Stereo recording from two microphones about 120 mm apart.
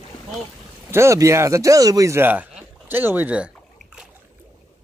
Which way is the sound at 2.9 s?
15° right (ahead or behind).